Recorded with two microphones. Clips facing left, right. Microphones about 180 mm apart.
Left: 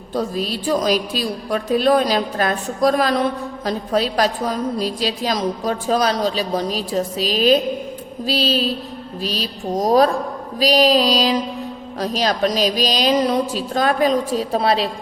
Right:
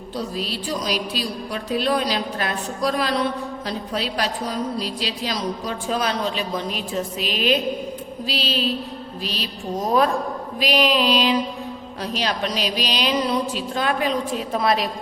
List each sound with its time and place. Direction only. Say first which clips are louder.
0.1 s a woman's voice: left 5 dB; 45° left (ahead or behind)